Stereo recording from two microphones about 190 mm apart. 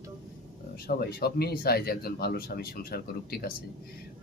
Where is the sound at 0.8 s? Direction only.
55° left (ahead or behind).